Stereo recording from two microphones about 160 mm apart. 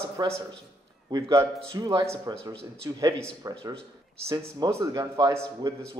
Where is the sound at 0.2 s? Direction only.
25° right (ahead or behind).